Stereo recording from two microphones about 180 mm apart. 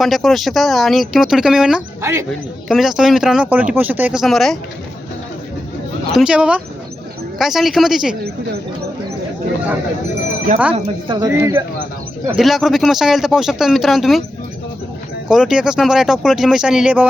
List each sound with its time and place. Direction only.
0.0 s speech: centre (ahead or behind)
6.1 s speech: 5° right (ahead or behind)
10.5 s speech: 45° right (ahead or behind)
11.2 s speech: 15° right (ahead or behind)
12.3 s speech: centre (ahead or behind)
15.3 s speech: 5° right (ahead or behind)